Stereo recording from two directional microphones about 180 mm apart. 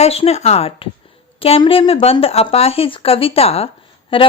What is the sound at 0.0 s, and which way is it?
A woman's voice, 35° left (ahead or behind).